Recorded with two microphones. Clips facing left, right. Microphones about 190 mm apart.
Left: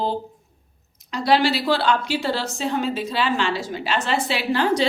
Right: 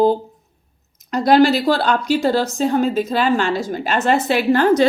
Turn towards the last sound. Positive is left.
turn(degrees=-50)  # may be behind; listen again after turning